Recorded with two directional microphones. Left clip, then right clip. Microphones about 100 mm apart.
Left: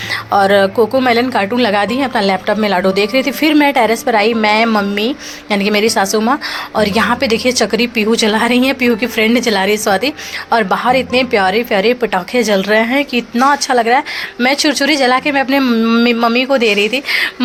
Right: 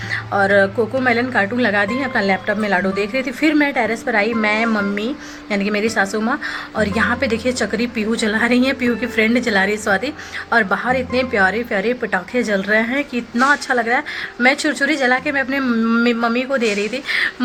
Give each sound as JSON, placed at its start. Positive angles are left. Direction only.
{"t": 0.1, "sound": "a woman's voice", "side_deg": 30}